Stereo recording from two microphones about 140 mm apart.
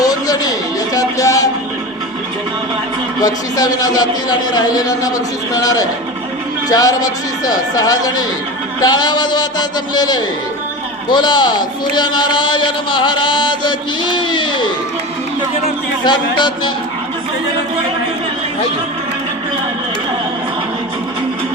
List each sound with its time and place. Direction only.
0.0 s a sound: 25° left (ahead or behind)
0.9 s music: 25° left (ahead or behind)
3.2 s a man's voice: 25° left (ahead or behind)
16.0 s a man's voice: 35° left (ahead or behind)